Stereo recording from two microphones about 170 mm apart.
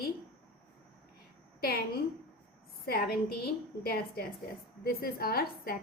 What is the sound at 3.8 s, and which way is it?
A woman's voice, 65° left (ahead or behind).